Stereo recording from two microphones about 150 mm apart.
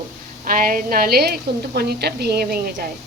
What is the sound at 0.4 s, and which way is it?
A woman's voice, 70° right (ahead or behind).